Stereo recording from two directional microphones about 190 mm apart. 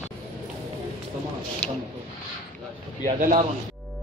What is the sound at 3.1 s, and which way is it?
Speech, 45° right (ahead or behind).